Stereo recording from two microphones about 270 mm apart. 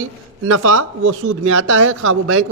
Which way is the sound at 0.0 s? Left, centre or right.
Right.